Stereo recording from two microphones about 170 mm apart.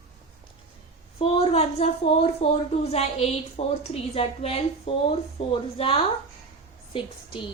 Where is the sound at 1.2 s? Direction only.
35° left (ahead or behind).